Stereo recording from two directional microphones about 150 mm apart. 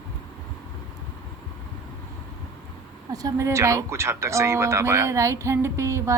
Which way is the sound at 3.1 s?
20° right (ahead or behind).